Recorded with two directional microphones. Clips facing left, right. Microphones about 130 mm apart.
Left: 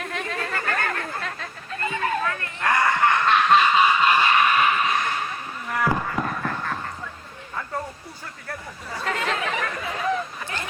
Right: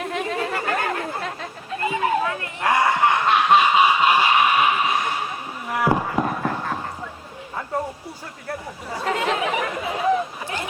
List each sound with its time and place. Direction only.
0.0 s chatter: 15° right (ahead or behind)
8.4 s chatter: 20° right (ahead or behind)